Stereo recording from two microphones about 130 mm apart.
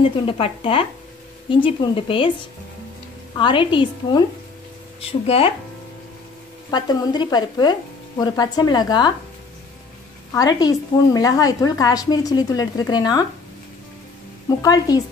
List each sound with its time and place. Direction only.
0.0 s speech: 45° left (ahead or behind)
3.3 s speech: 40° left (ahead or behind)
6.7 s speech: 30° left (ahead or behind)
10.3 s a woman's voice: 30° left (ahead or behind)
14.6 s a woman's voice: 30° left (ahead or behind)